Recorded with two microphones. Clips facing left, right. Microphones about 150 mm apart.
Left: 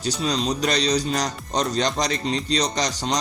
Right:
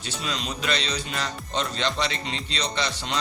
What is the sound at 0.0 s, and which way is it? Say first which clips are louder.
Speech: left 8 dB; 40° left (ahead or behind).